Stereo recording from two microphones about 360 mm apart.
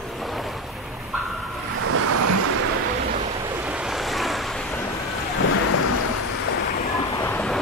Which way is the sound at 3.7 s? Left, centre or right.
Centre.